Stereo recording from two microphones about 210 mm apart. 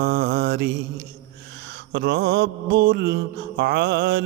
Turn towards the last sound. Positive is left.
turn(degrees=-50)  # may be behind; listen again after turning